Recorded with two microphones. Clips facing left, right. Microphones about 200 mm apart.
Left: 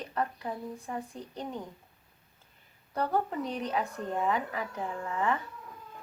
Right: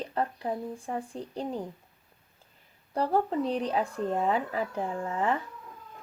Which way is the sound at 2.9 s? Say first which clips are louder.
Right 4 dB; 30° right (ahead or behind).